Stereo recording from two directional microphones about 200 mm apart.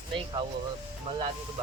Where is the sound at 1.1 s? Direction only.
35° right (ahead or behind).